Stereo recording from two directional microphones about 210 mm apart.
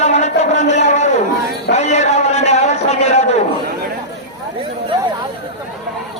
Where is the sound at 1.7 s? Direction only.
30° left (ahead or behind).